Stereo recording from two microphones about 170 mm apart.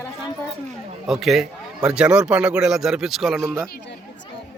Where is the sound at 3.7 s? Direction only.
90° left.